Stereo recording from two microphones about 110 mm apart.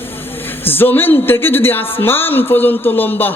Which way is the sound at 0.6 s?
20° left (ahead or behind).